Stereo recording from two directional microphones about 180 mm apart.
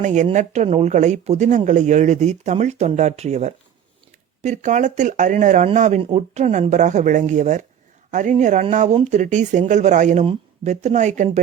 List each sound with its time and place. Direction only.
0.0 s speech: 40° right (ahead or behind)